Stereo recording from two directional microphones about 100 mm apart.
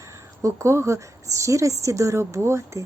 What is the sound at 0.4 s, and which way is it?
A woman's voice, 25° right (ahead or behind).